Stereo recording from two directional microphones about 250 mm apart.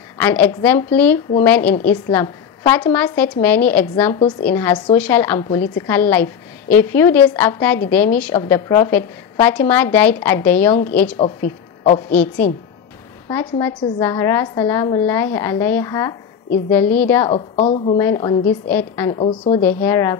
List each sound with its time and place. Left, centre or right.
0.2 s a woman's voice: centre
12.1 s a woman's voice: centre
17.3 s a woman's voice: left
17.9 s a woman's voice: centre
19.1 s a woman's voice: left
19.6 s a woman's voice: centre